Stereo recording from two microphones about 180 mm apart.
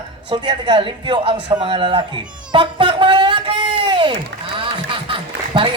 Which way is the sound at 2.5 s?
25° right (ahead or behind).